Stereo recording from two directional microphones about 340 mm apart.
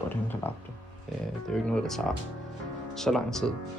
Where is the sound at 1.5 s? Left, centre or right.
Centre.